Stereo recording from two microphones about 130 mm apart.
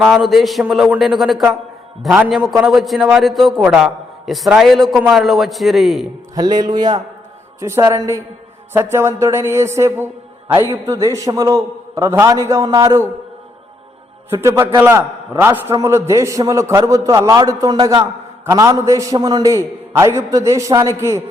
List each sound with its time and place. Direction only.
0.0 s a man's voice: centre (ahead or behind)
2.0 s a man's voice: 10° right (ahead or behind)
2.3 s a man's voice: centre (ahead or behind)
6.3 s a man's voice: 30° right (ahead or behind)
14.3 s a man's voice: 20° right (ahead or behind)